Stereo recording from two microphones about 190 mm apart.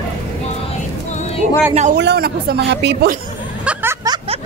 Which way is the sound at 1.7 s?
35° right (ahead or behind).